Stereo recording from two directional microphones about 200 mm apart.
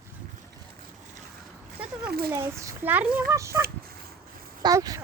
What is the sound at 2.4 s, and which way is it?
A child's voice, 15° right (ahead or behind).